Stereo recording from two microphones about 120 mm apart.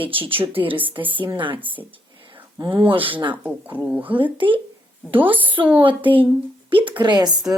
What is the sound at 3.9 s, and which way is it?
Speech, 10° right (ahead or behind).